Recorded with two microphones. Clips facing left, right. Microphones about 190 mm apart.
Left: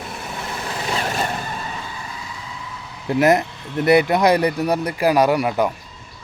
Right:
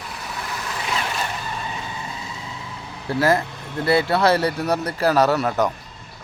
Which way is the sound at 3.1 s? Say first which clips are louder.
Left 3 dB; 20° left (ahead or behind).